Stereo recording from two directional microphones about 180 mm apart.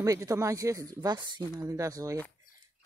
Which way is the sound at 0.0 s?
15° right (ahead or behind).